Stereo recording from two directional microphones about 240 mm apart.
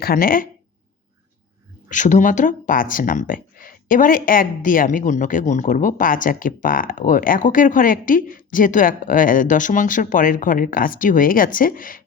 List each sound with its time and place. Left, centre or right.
0.0 s speech: left
1.9 s speech: left